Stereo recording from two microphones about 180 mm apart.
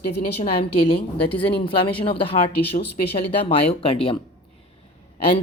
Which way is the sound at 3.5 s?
30° left (ahead or behind).